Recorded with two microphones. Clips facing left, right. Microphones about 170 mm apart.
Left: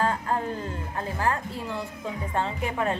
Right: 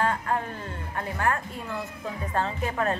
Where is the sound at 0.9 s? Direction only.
25° left (ahead or behind).